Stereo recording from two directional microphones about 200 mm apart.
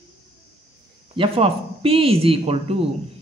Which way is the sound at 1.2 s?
30° right (ahead or behind).